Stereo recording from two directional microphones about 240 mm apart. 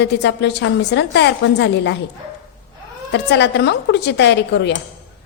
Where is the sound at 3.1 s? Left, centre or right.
Left.